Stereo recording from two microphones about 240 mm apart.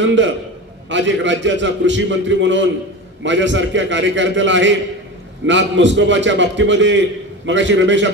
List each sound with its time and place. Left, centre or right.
0.0 s a man's voice: right